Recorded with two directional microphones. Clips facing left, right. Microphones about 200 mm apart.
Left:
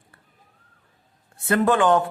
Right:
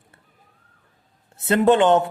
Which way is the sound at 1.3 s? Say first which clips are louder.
Right 3 dB; 25° right (ahead or behind).